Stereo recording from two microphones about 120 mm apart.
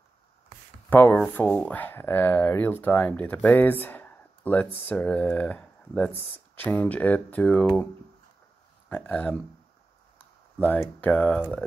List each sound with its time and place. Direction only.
0.8 s speech: 15° left (ahead or behind)
8.8 s speech: 15° left (ahead or behind)
10.6 s speech: 15° left (ahead or behind)